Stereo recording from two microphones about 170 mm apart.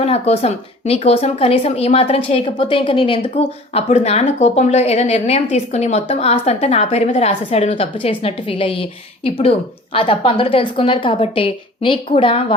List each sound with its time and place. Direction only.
0.0 s speech: 40° left (ahead or behind)